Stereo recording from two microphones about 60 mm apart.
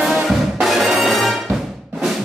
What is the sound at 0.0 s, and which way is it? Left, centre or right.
Music, centre.